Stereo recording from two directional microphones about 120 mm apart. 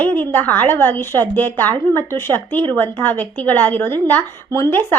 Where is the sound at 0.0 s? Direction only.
15° left (ahead or behind).